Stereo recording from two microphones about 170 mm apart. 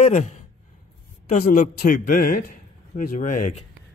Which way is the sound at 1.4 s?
55° left (ahead or behind).